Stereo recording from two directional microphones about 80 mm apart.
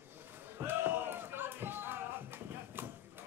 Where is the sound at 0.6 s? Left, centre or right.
Right.